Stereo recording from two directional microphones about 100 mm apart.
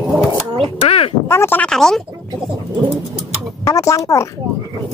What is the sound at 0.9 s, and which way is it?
Speech, 70° left (ahead or behind).